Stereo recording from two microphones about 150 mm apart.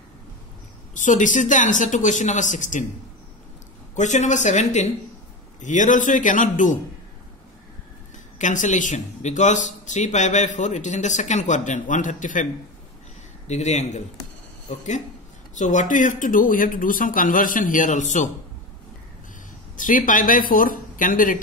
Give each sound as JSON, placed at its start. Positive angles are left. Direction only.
{"t": 0.9, "sound": "speech", "side_deg": 60}
{"t": 3.9, "sound": "speech", "side_deg": 55}
{"t": 8.4, "sound": "speech", "side_deg": 55}
{"t": 13.5, "sound": "speech", "side_deg": 50}
{"t": 15.5, "sound": "speech", "side_deg": 55}
{"t": 19.8, "sound": "speech", "side_deg": 65}